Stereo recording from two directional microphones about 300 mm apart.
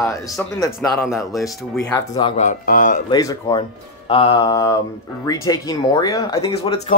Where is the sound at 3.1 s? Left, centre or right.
Centre.